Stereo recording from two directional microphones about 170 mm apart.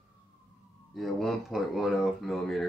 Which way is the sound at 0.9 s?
Centre (ahead or behind).